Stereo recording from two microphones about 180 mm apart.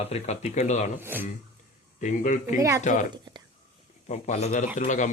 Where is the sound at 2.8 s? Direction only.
45° left (ahead or behind).